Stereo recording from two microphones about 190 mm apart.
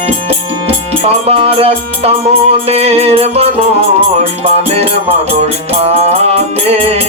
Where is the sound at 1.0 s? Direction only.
30° right (ahead or behind).